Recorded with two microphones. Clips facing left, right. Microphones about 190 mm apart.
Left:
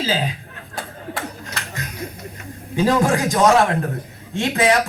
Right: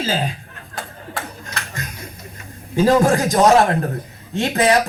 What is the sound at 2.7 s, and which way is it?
Speech, 40° right (ahead or behind).